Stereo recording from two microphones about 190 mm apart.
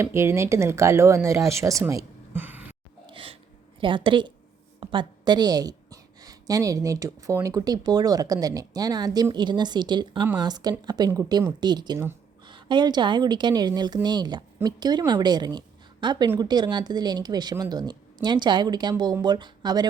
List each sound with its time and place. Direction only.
0.0 s speech: 15° right (ahead or behind)
3.1 s sneeze: 30° right (ahead or behind)
3.8 s a woman's voice: 25° right (ahead or behind)